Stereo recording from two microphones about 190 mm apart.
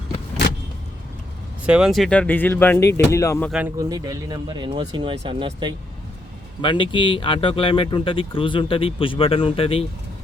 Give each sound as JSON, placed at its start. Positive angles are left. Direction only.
{"t": 1.6, "sound": "speech", "side_deg": -5}
{"t": 3.8, "sound": "speech", "side_deg": -20}
{"t": 6.6, "sound": "speech", "side_deg": 25}